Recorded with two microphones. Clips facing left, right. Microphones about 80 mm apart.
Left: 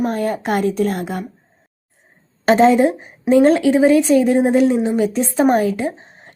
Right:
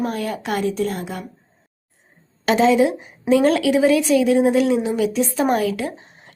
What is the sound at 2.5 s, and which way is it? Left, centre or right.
A woman's voice, left.